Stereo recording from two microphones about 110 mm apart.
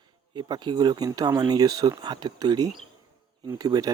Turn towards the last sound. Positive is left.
turn(degrees=-35)  # may be behind; listen again after turning